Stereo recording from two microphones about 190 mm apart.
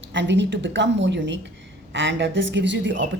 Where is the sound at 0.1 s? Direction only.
70° right (ahead or behind).